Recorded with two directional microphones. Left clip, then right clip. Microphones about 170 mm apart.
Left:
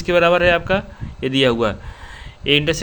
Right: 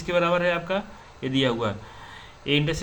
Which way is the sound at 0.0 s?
45° left (ahead or behind).